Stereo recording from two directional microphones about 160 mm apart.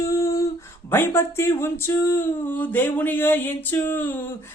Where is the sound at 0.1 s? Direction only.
20° left (ahead or behind).